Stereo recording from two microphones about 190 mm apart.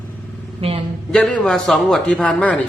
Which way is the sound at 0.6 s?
30° right (ahead or behind).